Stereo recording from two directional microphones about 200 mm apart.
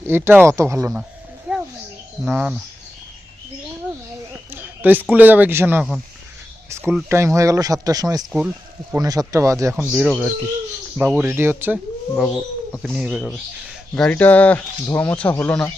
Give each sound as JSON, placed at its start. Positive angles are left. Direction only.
{"t": 0.0, "sound": "speech", "side_deg": -10}
{"t": 1.5, "sound": "bird", "side_deg": -5}
{"t": 2.2, "sound": "speech", "side_deg": -5}
{"t": 4.8, "sound": "speech", "side_deg": -10}
{"t": 12.1, "sound": "speech", "side_deg": 0}